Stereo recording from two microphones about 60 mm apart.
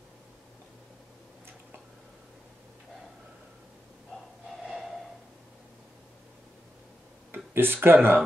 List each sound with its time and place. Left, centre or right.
4.6 s snort: centre
7.3 s speech: right